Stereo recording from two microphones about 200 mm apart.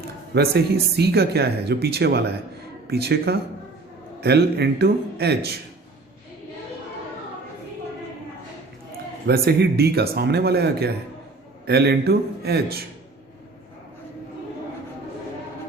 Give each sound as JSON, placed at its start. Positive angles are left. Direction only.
{"t": 0.3, "sound": "speech", "side_deg": -55}
{"t": 9.2, "sound": "speech", "side_deg": -50}